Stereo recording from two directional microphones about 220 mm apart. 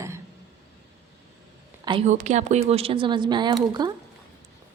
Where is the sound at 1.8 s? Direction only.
30° right (ahead or behind).